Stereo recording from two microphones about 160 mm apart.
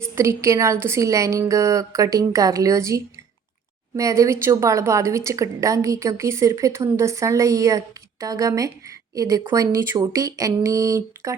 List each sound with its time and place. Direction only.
0.2 s a woman's voice: 20° right (ahead or behind)